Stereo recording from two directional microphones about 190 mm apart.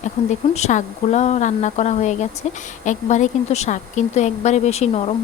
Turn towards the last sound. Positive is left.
turn(degrees=35)  # may be behind; listen again after turning